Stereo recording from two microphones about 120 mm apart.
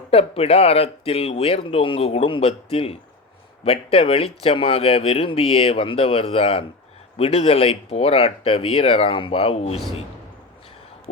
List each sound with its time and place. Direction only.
0.1 s speech: 55° left (ahead or behind)